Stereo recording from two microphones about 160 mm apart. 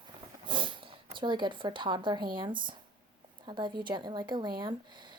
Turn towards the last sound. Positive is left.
turn(degrees=-30)  # may be behind; listen again after turning